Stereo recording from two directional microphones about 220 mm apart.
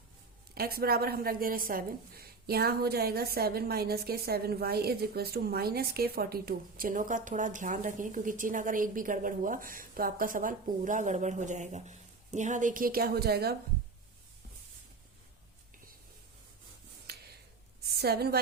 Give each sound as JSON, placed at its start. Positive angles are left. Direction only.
{"t": 0.5, "sound": "a woman's voice", "side_deg": -45}
{"t": 17.1, "sound": "a sound", "side_deg": -45}
{"t": 17.9, "sound": "a woman's voice", "side_deg": -45}